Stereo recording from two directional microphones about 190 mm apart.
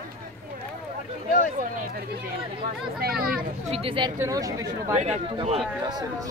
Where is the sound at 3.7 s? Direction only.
30° right (ahead or behind).